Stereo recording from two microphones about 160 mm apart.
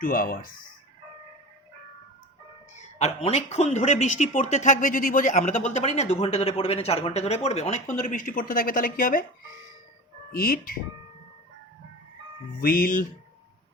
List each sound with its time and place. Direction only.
0.0 s speech: 60° left (ahead or behind)
2.7 s speech: 40° left (ahead or behind); by 9.2 s 60° left (ahead or behind)
10.3 s speech: 65° left (ahead or behind)
12.6 s speech: 65° left (ahead or behind)